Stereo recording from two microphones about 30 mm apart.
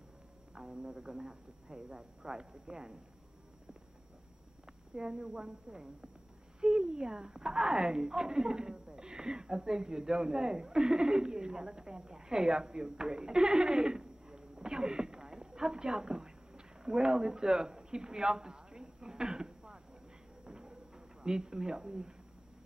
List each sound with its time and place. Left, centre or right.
0.6 s speech: right
4.9 s a woman's voice: right
20.4 s a sound: right